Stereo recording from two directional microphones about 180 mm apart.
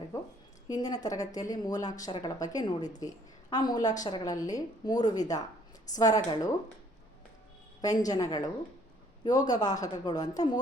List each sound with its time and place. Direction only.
0.7 s a woman's voice: 20° left (ahead or behind)
7.8 s a woman's voice: 20° left (ahead or behind)
9.5 s a woman's voice: 20° left (ahead or behind)